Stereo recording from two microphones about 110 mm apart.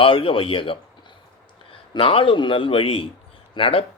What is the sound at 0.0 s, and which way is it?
Speech, 55° left (ahead or behind).